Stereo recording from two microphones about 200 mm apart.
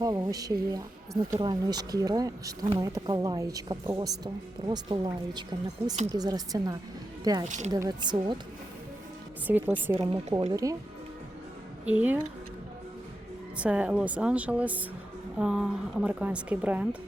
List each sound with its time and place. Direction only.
0.0 s speech: 20° right (ahead or behind)
7.4 s speech: 35° right (ahead or behind)
7.7 s speech: 20° right (ahead or behind)
9.5 s a woman's voice: 10° right (ahead or behind)
10.0 s speech: 30° right (ahead or behind)
10.5 s a woman's voice: 15° right (ahead or behind)
11.9 s a woman's voice: 5° right (ahead or behind)
13.6 s a woman's voice: 5° right (ahead or behind)